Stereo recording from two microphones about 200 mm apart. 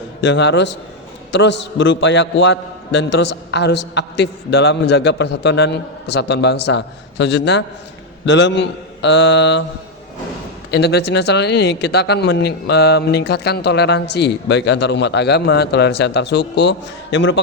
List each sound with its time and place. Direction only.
0.2 s speech: 60° left (ahead or behind)
10.7 s speech: 55° left (ahead or behind)